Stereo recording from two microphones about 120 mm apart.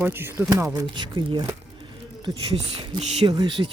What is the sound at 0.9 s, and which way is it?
Speech, 40° right (ahead or behind).